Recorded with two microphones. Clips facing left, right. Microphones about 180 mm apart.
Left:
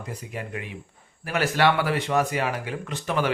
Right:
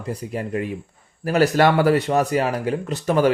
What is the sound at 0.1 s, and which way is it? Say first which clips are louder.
Speech: right 9 dB; 35° right (ahead or behind).